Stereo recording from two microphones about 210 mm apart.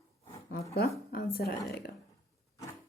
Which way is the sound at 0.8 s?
45° left (ahead or behind).